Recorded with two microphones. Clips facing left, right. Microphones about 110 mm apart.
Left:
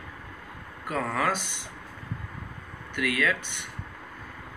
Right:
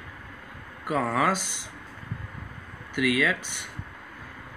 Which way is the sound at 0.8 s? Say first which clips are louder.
Right 3 dB; 10° right (ahead or behind).